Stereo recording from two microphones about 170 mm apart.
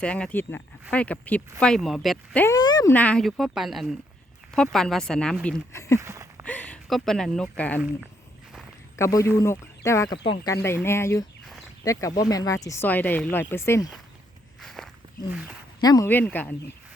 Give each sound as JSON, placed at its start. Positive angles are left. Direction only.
{"t": 0.0, "sound": "speech", "side_deg": 5}
{"t": 2.4, "sound": "speech", "side_deg": 20}
{"t": 2.9, "sound": "speech", "side_deg": 10}
{"t": 5.7, "sound": "speech", "side_deg": 15}
{"t": 6.0, "sound": "a sound", "side_deg": -20}
{"t": 6.4, "sound": "speech", "side_deg": 10}
{"t": 9.0, "sound": "speech", "side_deg": 20}
{"t": 14.6, "sound": "walk", "side_deg": 0}
{"t": 15.3, "sound": "speech", "side_deg": -5}
{"t": 15.8, "sound": "speech", "side_deg": 20}
{"t": 16.0, "sound": "speech", "side_deg": 10}